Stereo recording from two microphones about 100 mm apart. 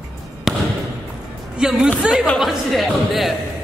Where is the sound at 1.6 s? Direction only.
5° right (ahead or behind).